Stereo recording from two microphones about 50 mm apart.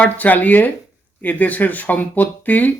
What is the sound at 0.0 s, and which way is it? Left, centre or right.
Speech, left.